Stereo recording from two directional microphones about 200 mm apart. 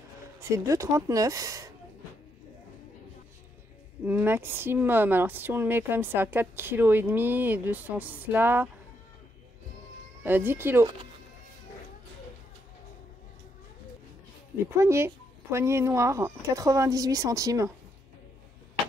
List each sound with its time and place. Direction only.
0.4 s speech: 15° right (ahead or behind)
4.0 s speech: 10° right (ahead or behind)
10.2 s speech: 10° right (ahead or behind)
14.8 s speech: 15° right (ahead or behind)